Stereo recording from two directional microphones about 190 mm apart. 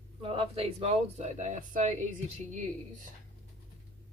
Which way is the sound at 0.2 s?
30° right (ahead or behind).